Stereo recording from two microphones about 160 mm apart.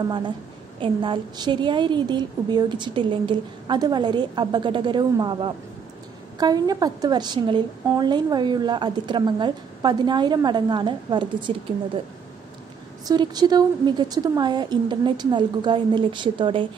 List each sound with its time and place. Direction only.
0.7 s a woman's voice: 30° right (ahead or behind)
13.0 s a woman's voice: 25° right (ahead or behind)